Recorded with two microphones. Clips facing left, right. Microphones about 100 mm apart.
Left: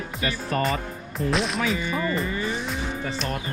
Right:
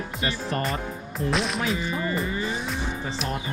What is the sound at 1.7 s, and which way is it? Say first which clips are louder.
Speech: left 1 dB; 20° right (ahead or behind).